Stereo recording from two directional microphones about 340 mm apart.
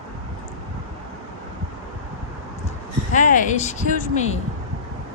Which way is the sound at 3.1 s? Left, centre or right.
Left.